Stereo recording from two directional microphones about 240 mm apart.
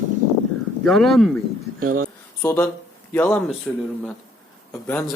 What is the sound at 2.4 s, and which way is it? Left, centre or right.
A man's voice, centre.